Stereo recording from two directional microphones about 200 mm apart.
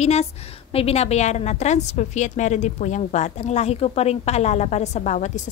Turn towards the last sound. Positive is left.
turn(degrees=35)  # may be behind; listen again after turning